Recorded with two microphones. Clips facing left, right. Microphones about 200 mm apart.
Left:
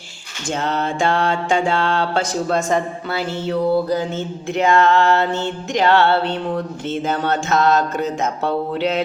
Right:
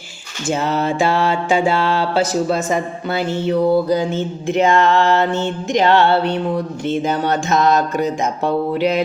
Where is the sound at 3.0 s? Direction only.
20° right (ahead or behind).